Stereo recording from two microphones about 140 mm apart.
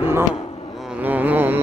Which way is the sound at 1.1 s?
15° right (ahead or behind).